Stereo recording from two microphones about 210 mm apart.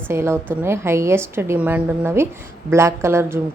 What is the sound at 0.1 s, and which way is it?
A woman's voice, 10° right (ahead or behind).